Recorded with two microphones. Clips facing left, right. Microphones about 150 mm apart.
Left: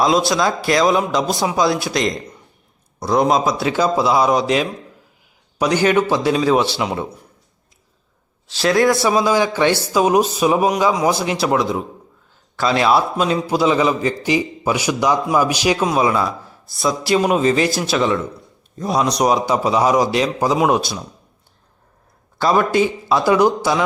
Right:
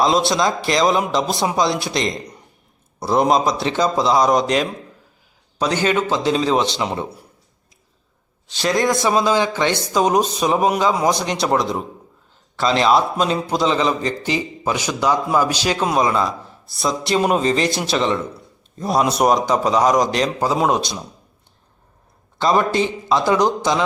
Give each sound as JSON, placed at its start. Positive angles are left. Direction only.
{"t": 0.0, "sound": "a man's voice", "side_deg": 0}
{"t": 6.9, "sound": "speech", "side_deg": -15}
{"t": 8.4, "sound": "a man's voice", "side_deg": 0}
{"t": 8.7, "sound": "speech", "side_deg": -15}
{"t": 9.0, "sound": "a man's voice", "side_deg": 5}
{"t": 22.4, "sound": "a man's voice", "side_deg": 5}